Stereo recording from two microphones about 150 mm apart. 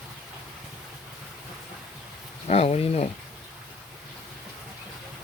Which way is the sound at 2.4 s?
45° left (ahead or behind).